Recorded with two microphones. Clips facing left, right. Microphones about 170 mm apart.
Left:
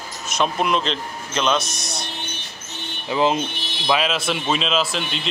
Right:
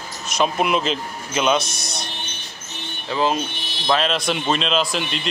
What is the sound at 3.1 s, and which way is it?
Speech, 20° left (ahead or behind).